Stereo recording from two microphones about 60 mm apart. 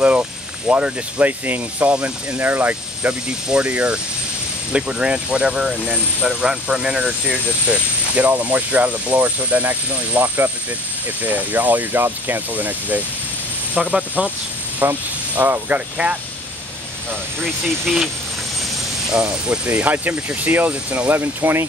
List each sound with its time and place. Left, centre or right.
0.0 s speech: right
2.3 s speech: right
13.7 s speech: centre
14.8 s speech: right
17.9 s speech: centre
19.0 s speech: centre
21.2 s speech: right